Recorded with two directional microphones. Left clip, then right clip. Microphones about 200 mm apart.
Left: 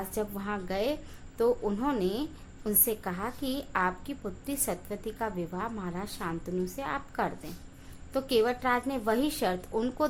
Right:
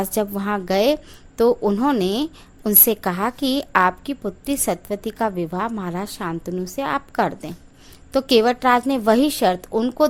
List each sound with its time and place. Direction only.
0.1 s a woman's voice: 45° right (ahead or behind)